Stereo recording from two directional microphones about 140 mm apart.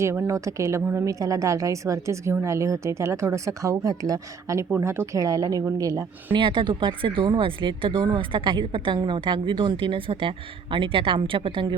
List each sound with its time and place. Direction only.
0.0 s speech: 20° right (ahead or behind)
6.3 s a woman's voice: 35° right (ahead or behind)